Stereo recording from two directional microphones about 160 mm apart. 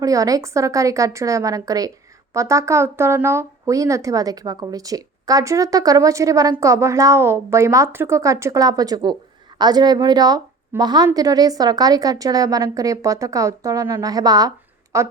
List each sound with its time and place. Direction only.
0.0 s a woman's voice: 20° right (ahead or behind)